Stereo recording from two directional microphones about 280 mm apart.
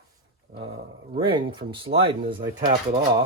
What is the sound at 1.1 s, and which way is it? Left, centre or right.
Speech, centre.